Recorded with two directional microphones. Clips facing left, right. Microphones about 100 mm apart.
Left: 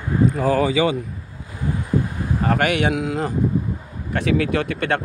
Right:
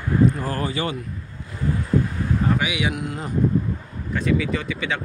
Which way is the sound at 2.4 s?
65° left (ahead or behind).